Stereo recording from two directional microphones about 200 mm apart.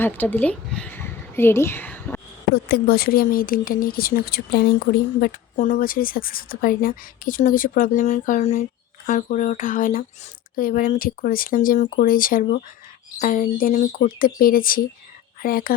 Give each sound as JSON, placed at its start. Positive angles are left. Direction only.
{"t": 0.0, "sound": "speech", "side_deg": 10}
{"t": 2.6, "sound": "a woman's voice", "side_deg": 50}
{"t": 5.2, "sound": "a woman's voice", "side_deg": 40}